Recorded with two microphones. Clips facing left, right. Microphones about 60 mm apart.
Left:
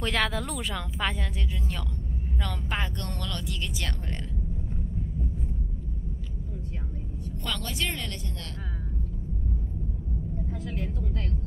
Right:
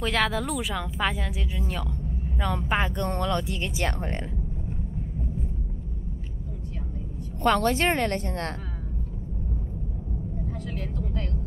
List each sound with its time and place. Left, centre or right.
0.0 s speech: centre
2.4 s speech: centre
7.4 s speech: right